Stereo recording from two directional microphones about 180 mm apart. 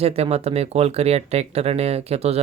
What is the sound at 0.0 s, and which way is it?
Speech, 35° right (ahead or behind).